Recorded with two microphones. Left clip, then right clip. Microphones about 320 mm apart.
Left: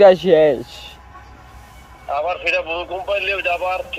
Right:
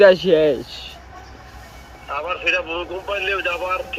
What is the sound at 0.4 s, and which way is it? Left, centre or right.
Speech, left.